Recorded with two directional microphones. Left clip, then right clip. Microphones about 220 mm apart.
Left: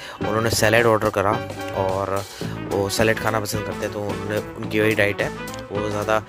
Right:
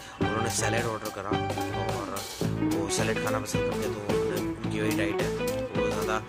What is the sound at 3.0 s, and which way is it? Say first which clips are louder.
Speech: left 8 dB; 40° left (ahead or behind).